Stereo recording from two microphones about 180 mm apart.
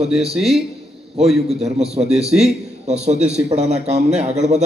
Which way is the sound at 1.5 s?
35° right (ahead or behind).